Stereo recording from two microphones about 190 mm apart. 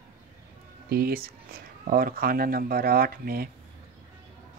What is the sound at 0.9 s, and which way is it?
Speech, 50° right (ahead or behind).